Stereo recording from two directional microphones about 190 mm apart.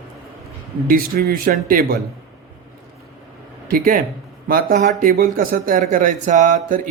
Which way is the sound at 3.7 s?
45° right (ahead or behind).